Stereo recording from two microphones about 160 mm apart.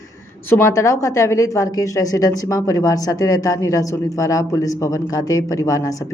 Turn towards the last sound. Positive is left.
turn(degrees=20)  # may be behind; listen again after turning